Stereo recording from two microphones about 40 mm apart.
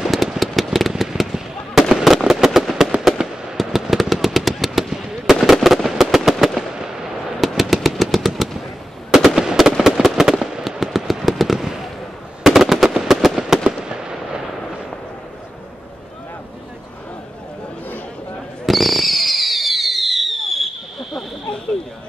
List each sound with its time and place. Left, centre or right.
0.0 s fireworks: centre
3.2 s fireworks: right
3.6 s fireworks: centre
7.3 s machine gun: centre
9.1 s fireworks: centre
12.4 s machine gun: centre
13.7 s fireworks: centre
18.7 s fireworks: centre